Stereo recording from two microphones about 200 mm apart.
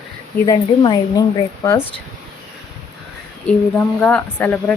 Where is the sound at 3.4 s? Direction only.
5° left (ahead or behind).